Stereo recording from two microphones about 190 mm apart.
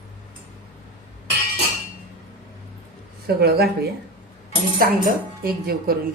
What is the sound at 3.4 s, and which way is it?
Speech, 55° right (ahead or behind).